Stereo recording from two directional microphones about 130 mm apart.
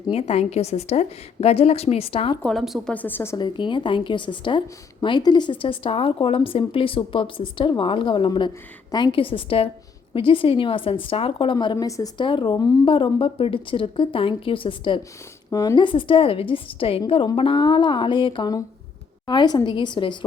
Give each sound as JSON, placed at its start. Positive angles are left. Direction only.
{"t": 0.1, "sound": "a woman's voice", "side_deg": 50}
{"t": 2.4, "sound": "a woman's voice", "side_deg": 0}
{"t": 2.9, "sound": "a woman's voice", "side_deg": 15}
{"t": 3.3, "sound": "a woman's voice", "side_deg": 35}
{"t": 15.4, "sound": "speech", "side_deg": 30}